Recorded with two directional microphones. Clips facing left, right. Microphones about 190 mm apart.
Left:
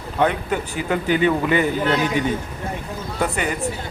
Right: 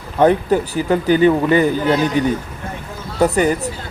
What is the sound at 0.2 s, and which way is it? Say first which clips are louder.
Speech: right 7 dB; 35° right (ahead or behind).